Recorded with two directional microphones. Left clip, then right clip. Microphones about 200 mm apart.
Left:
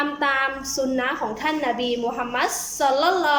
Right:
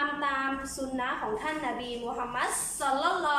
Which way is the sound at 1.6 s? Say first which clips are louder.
Left 10 dB; 55° left (ahead or behind).